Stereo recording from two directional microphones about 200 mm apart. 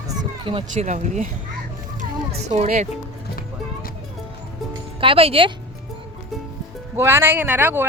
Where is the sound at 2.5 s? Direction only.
35° right (ahead or behind).